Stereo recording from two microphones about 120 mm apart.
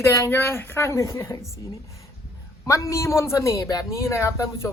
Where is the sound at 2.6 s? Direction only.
25° left (ahead or behind).